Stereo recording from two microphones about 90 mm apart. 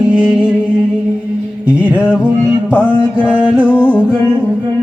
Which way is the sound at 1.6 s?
15° right (ahead or behind).